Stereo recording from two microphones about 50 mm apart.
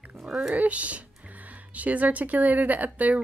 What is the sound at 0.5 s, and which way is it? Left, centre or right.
A woman's voice, right.